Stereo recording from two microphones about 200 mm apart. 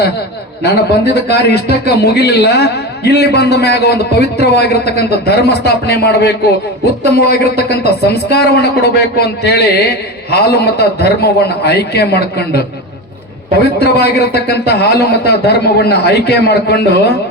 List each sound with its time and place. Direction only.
0.6 s a man's voice: 55° left (ahead or behind)
13.7 s a man's voice: 55° left (ahead or behind)